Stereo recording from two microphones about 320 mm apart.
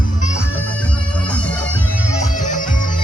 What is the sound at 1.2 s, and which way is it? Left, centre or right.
Music, centre.